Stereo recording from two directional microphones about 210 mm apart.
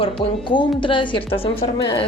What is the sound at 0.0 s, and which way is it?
A woman's voice, 25° left (ahead or behind).